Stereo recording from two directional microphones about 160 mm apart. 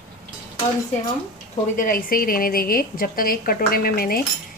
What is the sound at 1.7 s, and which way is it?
A woman's voice, 60° left (ahead or behind).